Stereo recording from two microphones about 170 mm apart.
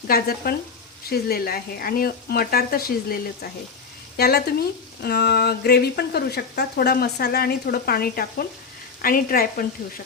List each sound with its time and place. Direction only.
0.1 s speech: 65° left (ahead or behind)